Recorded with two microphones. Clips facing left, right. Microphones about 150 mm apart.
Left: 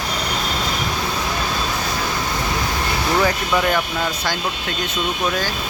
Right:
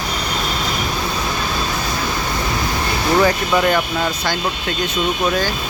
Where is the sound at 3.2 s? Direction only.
Centre (ahead or behind).